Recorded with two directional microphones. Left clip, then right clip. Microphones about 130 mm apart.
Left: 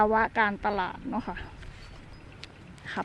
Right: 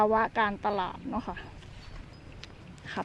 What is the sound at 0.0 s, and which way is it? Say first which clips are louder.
A woman's voice: left 2 dB; 20° left (ahead or behind).